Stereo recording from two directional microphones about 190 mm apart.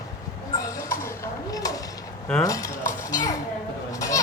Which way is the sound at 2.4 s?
20° left (ahead or behind).